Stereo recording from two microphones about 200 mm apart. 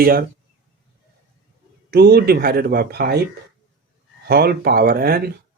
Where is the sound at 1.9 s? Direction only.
50° right (ahead or behind).